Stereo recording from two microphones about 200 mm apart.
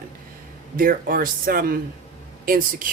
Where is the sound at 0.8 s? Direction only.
45° right (ahead or behind).